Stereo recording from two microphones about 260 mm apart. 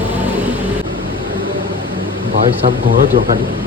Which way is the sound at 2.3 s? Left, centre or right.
Right.